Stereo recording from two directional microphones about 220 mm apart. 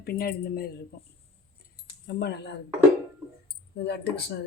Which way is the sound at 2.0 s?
50° left (ahead or behind).